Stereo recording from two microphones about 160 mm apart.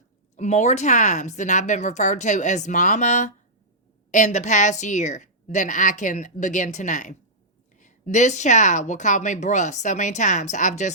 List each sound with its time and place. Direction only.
0.3 s speech: 45° left (ahead or behind)